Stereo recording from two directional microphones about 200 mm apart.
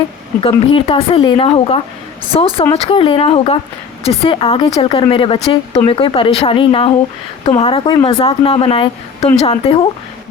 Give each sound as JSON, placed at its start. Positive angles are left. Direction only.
{"t": 0.3, "sound": "a woman's voice", "side_deg": 25}